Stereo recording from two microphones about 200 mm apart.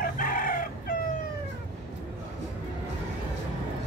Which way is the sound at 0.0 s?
45° left (ahead or behind).